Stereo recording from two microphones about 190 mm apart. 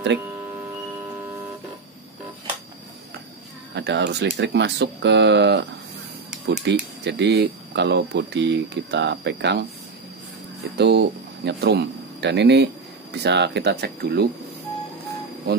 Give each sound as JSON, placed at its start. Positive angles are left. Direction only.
{"t": 3.7, "sound": "speech", "side_deg": -65}
{"t": 10.8, "sound": "speech", "side_deg": -60}